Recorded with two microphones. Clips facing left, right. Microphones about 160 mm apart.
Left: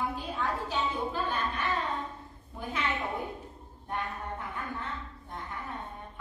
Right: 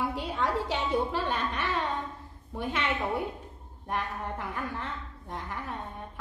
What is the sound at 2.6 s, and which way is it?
Speech, 80° right.